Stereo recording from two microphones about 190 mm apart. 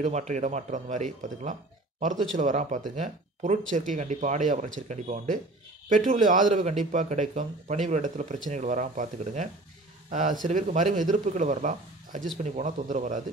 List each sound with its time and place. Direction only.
0.0 s speech: 35° right (ahead or behind)